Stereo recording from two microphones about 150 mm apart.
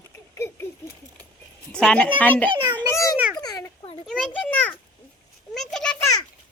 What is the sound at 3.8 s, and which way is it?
Children playing, 35° left (ahead or behind).